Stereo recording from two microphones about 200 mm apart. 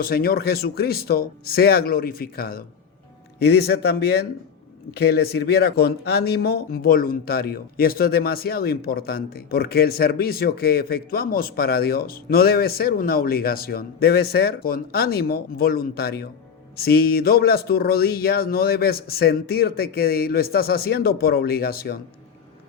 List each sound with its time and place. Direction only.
0.0 s speech: 50° left (ahead or behind)